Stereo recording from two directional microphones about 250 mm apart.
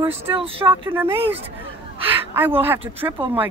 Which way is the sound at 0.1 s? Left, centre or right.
Right.